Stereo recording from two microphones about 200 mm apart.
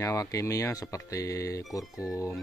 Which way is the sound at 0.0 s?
15° left (ahead or behind).